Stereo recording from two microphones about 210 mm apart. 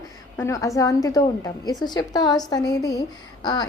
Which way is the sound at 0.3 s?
15° left (ahead or behind).